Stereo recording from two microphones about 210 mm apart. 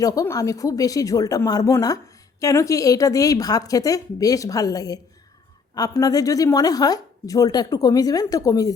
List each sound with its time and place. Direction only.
0.0 s a woman's voice: 15° left (ahead or behind)